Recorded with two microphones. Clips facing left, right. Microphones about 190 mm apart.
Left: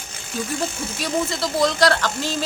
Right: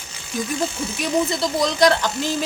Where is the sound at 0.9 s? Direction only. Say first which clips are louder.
Right 3 dB; 15° right (ahead or behind).